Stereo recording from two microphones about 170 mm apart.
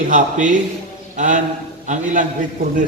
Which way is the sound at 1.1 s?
45° right (ahead or behind).